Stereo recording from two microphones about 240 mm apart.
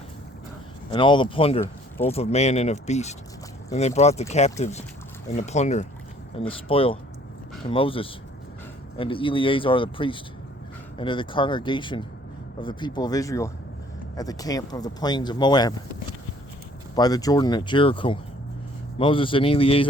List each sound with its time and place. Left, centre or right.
0.9 s speech: centre
16.9 s speech: centre